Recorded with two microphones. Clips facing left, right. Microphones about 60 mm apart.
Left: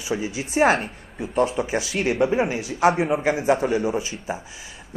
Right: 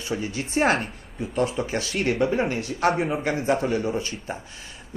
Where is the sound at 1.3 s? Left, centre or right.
Centre.